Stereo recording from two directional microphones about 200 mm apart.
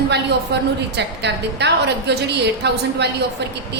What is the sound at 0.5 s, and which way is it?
A woman's voice, 55° right (ahead or behind).